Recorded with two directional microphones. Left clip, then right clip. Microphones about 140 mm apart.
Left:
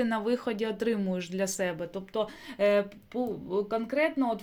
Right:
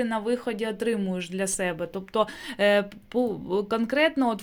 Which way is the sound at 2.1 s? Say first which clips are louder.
Right 8 dB; 65° right (ahead or behind).